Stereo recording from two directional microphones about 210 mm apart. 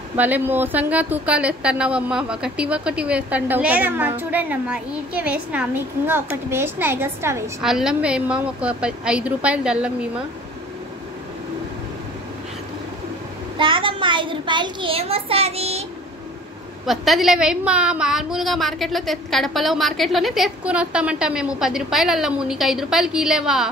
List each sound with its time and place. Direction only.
0.2 s a woman's voice: 10° right (ahead or behind)
13.6 s a child's voice: 25° right (ahead or behind)
16.8 s a woman's voice: centre (ahead or behind)